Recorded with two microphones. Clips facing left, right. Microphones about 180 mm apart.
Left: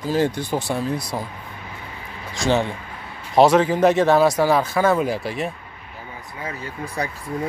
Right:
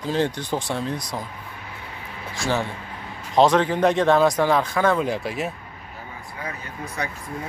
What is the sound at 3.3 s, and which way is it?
Speech, 10° left (ahead or behind).